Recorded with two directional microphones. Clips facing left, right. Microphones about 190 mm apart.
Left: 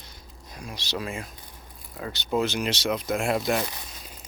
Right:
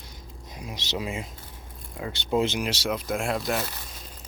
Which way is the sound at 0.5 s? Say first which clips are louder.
Right 1 dB; 20° right (ahead or behind).